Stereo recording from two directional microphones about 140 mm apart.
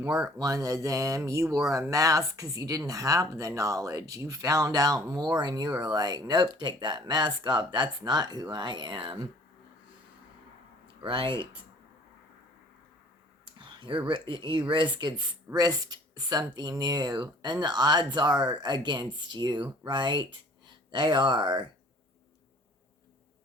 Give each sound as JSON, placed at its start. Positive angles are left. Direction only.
{"t": 0.3, "sound": "speech", "side_deg": -25}
{"t": 10.8, "sound": "speech", "side_deg": -35}
{"t": 13.6, "sound": "a sound", "side_deg": -35}
{"t": 14.1, "sound": "speech", "side_deg": -35}